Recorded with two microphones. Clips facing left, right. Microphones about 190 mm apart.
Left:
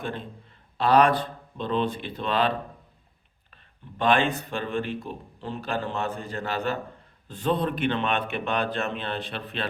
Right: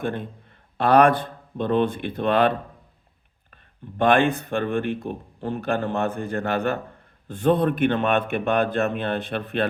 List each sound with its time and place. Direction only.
0.0 s speech: 55° right (ahead or behind)
3.5 s speech: 50° right (ahead or behind)